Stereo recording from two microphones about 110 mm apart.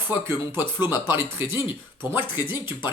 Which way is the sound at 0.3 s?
20° right (ahead or behind).